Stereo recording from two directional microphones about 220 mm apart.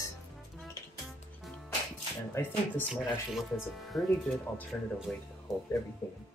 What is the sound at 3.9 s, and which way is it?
Speech, 15° left (ahead or behind).